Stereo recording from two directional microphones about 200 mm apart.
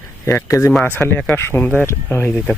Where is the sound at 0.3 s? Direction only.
15° left (ahead or behind).